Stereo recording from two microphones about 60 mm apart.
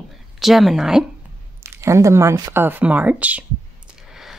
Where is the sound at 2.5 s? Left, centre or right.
Right.